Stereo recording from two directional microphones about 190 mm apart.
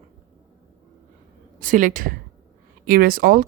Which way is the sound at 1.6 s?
45° right (ahead or behind).